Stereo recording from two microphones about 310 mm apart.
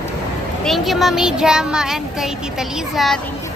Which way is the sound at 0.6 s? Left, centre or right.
Centre.